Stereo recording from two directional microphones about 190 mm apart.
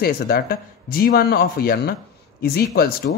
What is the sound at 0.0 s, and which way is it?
A man's voice, 50° left (ahead or behind).